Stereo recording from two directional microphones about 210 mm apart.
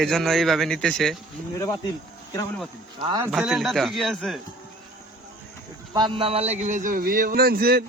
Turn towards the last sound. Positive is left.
turn(degrees=-45)  # may be behind; listen again after turning